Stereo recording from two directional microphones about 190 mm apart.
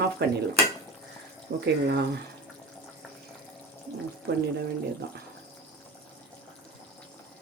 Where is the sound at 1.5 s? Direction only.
60° right (ahead or behind).